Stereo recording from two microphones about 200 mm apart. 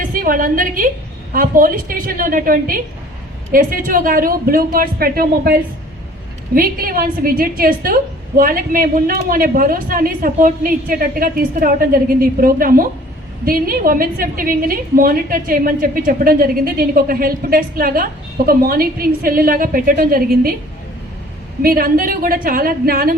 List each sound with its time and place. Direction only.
0.1 s a woman's voice: 45° right (ahead or behind)
21.6 s a woman's voice: 45° right (ahead or behind)